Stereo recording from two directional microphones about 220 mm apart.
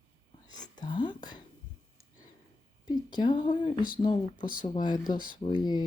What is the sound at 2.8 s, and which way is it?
Speech, 20° left (ahead or behind).